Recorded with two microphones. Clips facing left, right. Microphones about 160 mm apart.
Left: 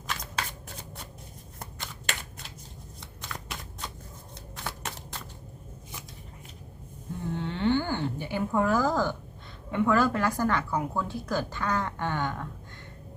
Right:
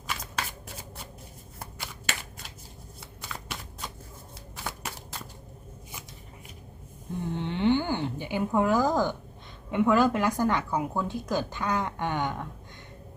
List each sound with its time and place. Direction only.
1.5 s shuffling cards: 5° right (ahead or behind)
7.3 s a sound: 20° right (ahead or behind)
9.7 s a woman's voice: 15° right (ahead or behind)